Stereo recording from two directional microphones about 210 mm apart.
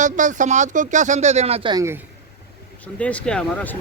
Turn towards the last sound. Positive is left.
turn(degrees=5)  # may be behind; listen again after turning